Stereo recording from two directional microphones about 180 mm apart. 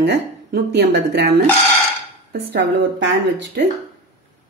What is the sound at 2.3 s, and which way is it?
Speech, 90° right.